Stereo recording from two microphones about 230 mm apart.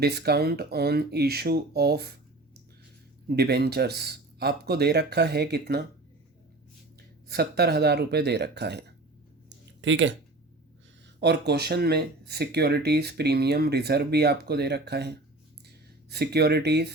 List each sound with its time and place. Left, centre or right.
0.0 s speech: right
3.2 s speech: right
7.3 s speech: right
9.8 s speech: right
11.2 s speech: right